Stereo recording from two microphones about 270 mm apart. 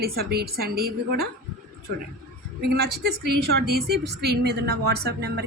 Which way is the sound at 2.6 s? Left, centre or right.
Right.